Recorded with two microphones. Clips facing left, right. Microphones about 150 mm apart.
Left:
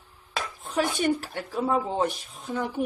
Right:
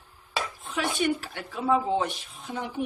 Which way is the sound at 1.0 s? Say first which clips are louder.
Left 1 dB; 40° left (ahead or behind).